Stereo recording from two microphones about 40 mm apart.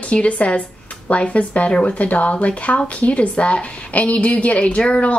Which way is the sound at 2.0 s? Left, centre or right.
Left.